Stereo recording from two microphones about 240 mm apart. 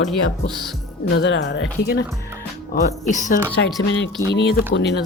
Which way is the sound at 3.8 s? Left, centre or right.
Left.